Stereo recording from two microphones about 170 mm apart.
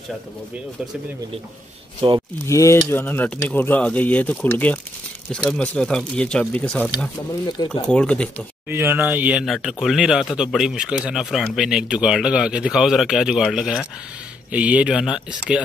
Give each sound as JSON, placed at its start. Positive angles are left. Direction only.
{"t": 2.0, "sound": "speech", "side_deg": -30}
{"t": 2.4, "sound": "speech", "side_deg": 15}
{"t": 7.4, "sound": "speech", "side_deg": 25}
{"t": 7.9, "sound": "speech", "side_deg": 5}
{"t": 8.6, "sound": "speech", "side_deg": -15}